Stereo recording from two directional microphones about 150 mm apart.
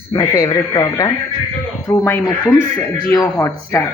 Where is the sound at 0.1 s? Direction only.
20° left (ahead or behind).